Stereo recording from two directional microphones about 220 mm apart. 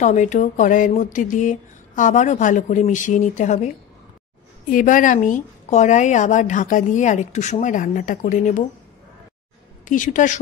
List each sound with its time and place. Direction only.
0.0 s a woman's voice: 35° left (ahead or behind)
9.8 s a woman's voice: 35° left (ahead or behind)